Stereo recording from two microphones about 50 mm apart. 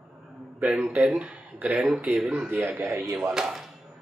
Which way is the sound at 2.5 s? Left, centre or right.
Right.